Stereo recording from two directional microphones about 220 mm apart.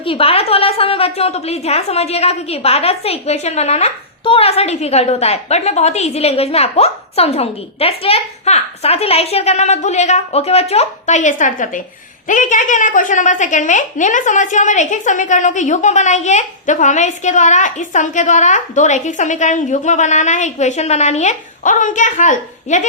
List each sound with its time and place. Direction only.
0.0 s a woman's voice: 25° left (ahead or behind)